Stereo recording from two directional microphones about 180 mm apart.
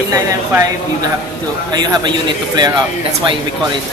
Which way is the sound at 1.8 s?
25° right (ahead or behind).